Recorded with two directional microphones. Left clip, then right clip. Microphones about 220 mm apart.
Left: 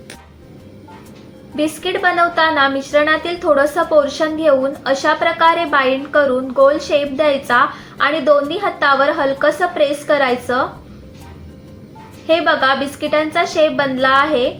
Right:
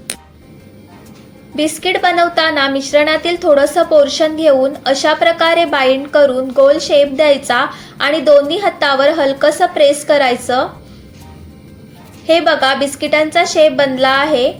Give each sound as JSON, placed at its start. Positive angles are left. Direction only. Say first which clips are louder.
{"t": 1.5, "sound": "a woman's voice", "louder": "right 4 dB", "side_deg": -25}
{"t": 12.2, "sound": "a woman's voice", "louder": "right 3 dB", "side_deg": -25}